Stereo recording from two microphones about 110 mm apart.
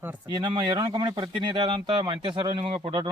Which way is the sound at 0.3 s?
40° right (ahead or behind).